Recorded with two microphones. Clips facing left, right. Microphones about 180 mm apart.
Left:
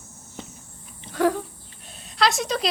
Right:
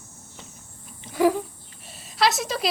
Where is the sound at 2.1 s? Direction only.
Centre (ahead or behind).